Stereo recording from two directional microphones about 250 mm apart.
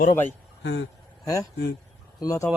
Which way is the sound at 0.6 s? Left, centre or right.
Left.